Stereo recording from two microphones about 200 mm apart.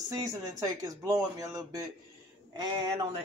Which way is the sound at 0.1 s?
20° right (ahead or behind).